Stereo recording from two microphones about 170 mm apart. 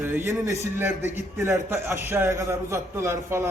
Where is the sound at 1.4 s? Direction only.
15° right (ahead or behind).